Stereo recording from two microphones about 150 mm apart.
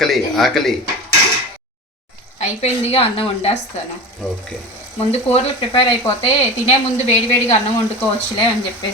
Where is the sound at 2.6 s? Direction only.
45° left (ahead or behind).